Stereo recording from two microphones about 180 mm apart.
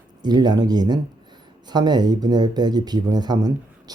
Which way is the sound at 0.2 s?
25° right (ahead or behind).